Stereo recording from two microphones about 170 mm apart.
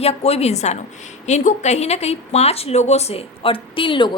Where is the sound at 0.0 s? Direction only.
35° left (ahead or behind).